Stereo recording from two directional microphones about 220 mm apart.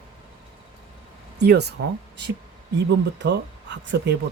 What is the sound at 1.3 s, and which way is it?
Speech, 50° right (ahead or behind).